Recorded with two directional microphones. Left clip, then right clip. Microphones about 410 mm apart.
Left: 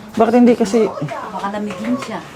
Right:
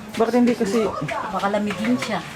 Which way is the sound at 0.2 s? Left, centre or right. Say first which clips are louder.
Left 7 dB; centre.